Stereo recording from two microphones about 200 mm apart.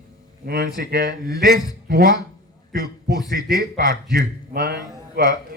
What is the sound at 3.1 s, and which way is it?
Speech, 20° left (ahead or behind).